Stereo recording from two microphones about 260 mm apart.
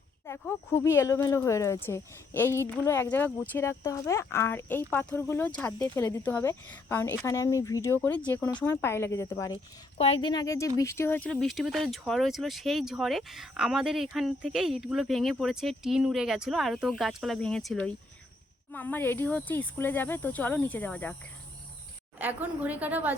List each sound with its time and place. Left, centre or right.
0.3 s speech: centre
22.2 s a woman's voice: centre